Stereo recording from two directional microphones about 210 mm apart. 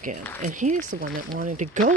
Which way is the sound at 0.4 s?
35° right (ahead or behind).